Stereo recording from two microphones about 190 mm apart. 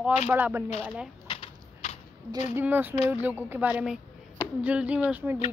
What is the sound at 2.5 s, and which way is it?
Speech, 10° right (ahead or behind).